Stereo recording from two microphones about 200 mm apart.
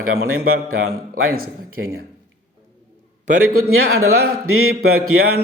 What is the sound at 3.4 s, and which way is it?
Speech, 90° right.